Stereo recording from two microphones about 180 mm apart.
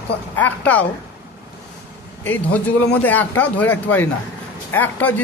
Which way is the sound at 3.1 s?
10° left (ahead or behind).